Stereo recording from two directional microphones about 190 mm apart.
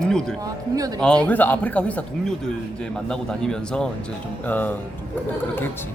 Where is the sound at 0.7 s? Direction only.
20° right (ahead or behind).